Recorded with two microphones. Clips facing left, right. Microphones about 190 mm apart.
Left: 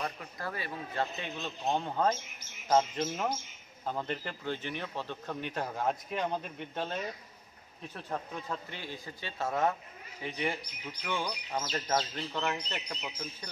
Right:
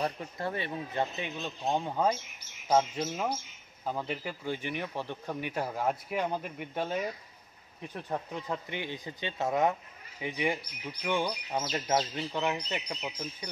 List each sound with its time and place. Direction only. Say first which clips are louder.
0.0 s speech: right 5 dB; 30° right (ahead or behind)